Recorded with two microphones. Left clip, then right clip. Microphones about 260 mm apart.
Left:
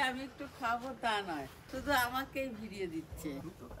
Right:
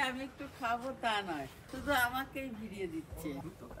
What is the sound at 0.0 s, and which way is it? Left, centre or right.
Speech, centre.